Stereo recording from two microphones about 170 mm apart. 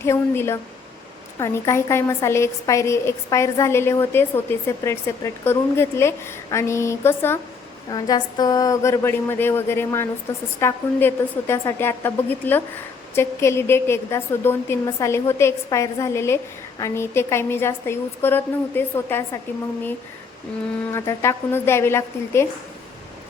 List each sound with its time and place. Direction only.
0.0 s a woman's voice: 15° left (ahead or behind)
7.9 s a woman's voice: 25° left (ahead or behind)
20.9 s a woman's voice: 15° left (ahead or behind)